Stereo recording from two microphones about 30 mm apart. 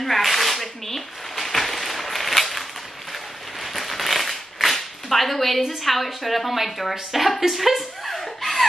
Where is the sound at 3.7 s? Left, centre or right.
Centre.